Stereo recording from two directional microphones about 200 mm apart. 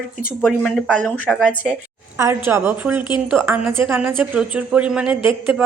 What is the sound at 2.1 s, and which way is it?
A woman's voice, 15° right (ahead or behind).